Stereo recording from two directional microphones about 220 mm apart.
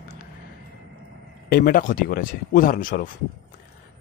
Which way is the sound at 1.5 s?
40° left (ahead or behind).